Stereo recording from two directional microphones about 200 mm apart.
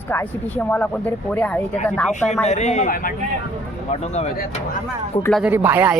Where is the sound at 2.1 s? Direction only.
35° left (ahead or behind).